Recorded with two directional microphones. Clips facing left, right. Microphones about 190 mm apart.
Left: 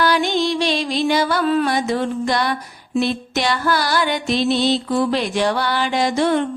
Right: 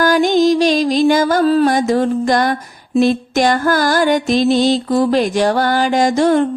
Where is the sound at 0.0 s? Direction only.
45° right (ahead or behind).